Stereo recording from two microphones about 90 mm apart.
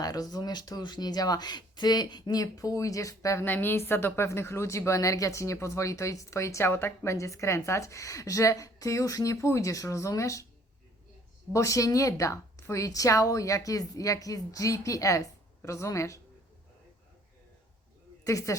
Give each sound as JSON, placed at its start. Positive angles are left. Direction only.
{"t": 0.0, "sound": "speech", "side_deg": 45}
{"t": 3.4, "sound": "a woman's voice", "side_deg": 20}
{"t": 11.5, "sound": "speech", "side_deg": 35}
{"t": 18.3, "sound": "speech", "side_deg": 35}